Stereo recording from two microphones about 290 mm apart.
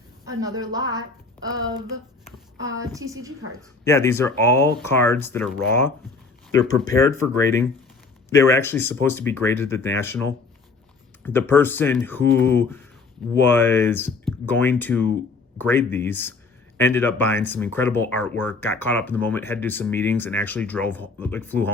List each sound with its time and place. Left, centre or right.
0.3 s a woman's voice: centre
3.8 s speech: centre
6.5 s speech: centre